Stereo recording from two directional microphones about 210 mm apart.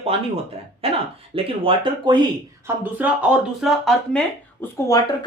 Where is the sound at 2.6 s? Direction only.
10° right (ahead or behind).